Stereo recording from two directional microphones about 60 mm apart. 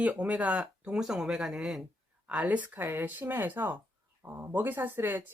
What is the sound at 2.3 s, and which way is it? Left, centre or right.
Speech, right.